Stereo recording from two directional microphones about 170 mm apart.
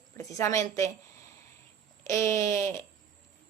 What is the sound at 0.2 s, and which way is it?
Speech, 20° left (ahead or behind).